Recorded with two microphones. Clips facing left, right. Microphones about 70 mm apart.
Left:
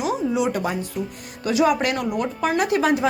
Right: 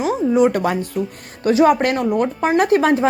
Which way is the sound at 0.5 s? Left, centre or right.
Right.